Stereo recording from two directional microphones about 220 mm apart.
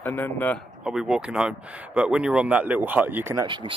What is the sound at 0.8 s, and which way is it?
Speech, 5° right (ahead or behind).